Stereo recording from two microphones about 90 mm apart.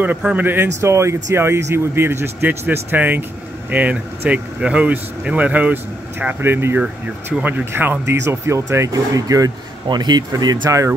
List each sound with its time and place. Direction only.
0.2 s speech: 15° right (ahead or behind); by 9.5 s 40° right (ahead or behind)
9.8 s speech: 55° right (ahead or behind)